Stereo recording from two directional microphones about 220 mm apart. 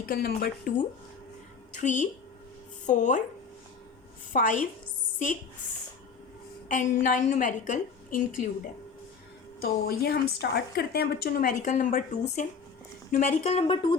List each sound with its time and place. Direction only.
0.0 s a woman's voice: 45° left (ahead or behind)
4.3 s a woman's voice: 35° left (ahead or behind)
6.7 s a woman's voice: 35° left (ahead or behind)
9.6 s a woman's voice: 45° left (ahead or behind); by 13.9 s 25° left (ahead or behind)